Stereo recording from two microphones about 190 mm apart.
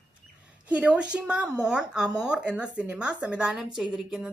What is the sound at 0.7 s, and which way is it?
A woman's voice, 5° right (ahead or behind).